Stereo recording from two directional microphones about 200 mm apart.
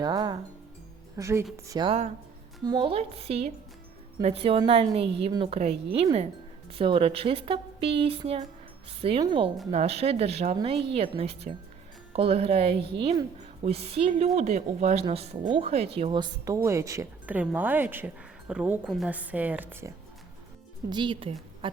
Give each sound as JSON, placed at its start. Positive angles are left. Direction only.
{"t": 0.0, "sound": "speech", "side_deg": -20}
{"t": 20.9, "sound": "speech", "side_deg": -25}